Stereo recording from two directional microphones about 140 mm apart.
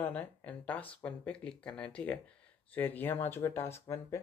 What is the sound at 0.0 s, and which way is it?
Speech, 10° left (ahead or behind).